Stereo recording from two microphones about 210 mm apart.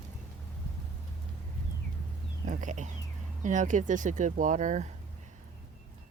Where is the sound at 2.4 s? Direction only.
35° right (ahead or behind).